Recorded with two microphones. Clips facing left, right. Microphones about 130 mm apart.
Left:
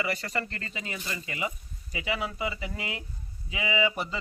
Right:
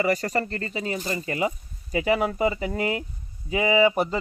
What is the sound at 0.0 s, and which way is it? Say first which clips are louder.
Speech: right 8 dB; 40° right (ahead or behind).